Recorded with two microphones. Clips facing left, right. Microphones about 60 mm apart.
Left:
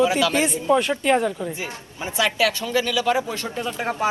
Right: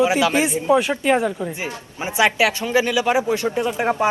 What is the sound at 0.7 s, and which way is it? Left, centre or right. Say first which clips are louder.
Speech: right 2 dB; centre.